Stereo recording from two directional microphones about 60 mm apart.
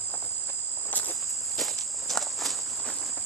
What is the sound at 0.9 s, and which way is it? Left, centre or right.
Insect, left.